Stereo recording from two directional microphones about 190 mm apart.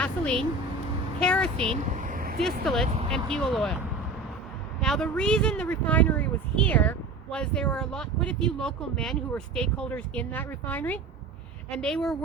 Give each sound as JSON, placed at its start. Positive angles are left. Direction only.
{"t": 0.0, "sound": "a sound", "side_deg": 5}
{"t": 1.2, "sound": "speech", "side_deg": 5}
{"t": 1.6, "sound": "vehicle", "side_deg": -35}
{"t": 2.4, "sound": "speech", "side_deg": 0}
{"t": 4.8, "sound": "speech", "side_deg": 5}